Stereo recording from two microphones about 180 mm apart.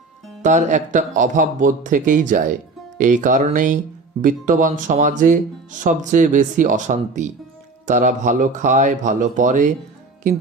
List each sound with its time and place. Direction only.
0.4 s speech: 40° right (ahead or behind)